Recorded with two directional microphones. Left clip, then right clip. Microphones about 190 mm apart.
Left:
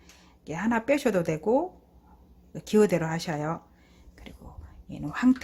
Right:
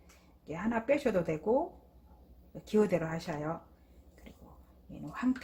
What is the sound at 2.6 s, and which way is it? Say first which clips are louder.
Speech: left 6 dB; 45° left (ahead or behind).